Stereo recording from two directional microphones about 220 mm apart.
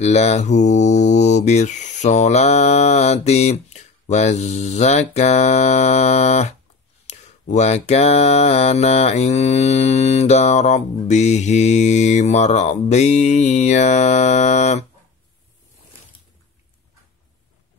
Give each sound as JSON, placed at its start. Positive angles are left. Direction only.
{"t": 0.0, "sound": "mantra", "side_deg": 30}